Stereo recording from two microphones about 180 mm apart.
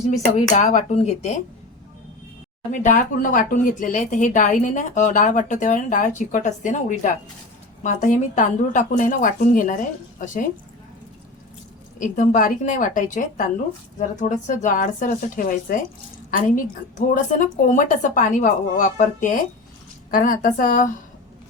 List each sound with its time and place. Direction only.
0.1 s speech: 40° left (ahead or behind)
2.8 s speech: 45° left (ahead or behind)
11.9 s speech: 45° left (ahead or behind)
17.3 s speech: 45° left (ahead or behind)